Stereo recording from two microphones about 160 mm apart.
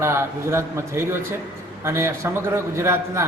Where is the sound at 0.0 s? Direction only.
15° right (ahead or behind).